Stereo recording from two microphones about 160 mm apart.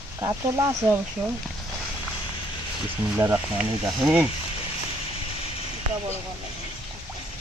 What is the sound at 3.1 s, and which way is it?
Speech, 10° right (ahead or behind).